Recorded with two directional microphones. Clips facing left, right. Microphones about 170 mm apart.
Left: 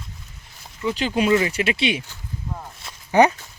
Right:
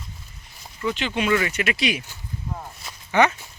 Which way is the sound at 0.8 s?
35° left (ahead or behind).